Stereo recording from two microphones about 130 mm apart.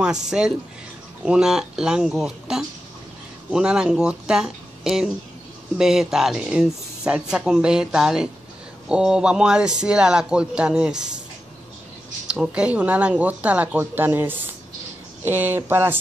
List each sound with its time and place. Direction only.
0.0 s speech: 5° right (ahead or behind)
12.3 s speech: 5° right (ahead or behind)